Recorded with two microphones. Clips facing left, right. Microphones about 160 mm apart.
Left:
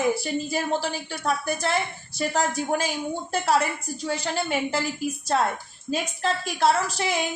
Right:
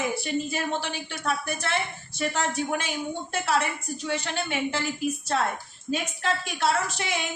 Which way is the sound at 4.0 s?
35° left (ahead or behind).